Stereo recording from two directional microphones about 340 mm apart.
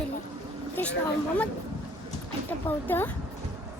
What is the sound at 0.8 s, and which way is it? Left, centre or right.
Speech, centre.